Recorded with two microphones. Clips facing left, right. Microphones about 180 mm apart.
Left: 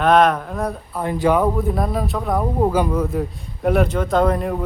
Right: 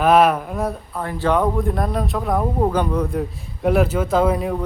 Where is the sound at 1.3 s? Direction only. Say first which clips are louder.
Even; 5° left (ahead or behind).